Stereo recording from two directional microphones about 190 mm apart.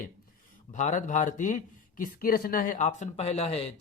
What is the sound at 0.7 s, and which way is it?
A man's voice, 40° left (ahead or behind).